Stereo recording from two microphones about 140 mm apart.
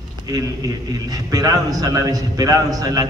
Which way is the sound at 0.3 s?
25° right (ahead or behind).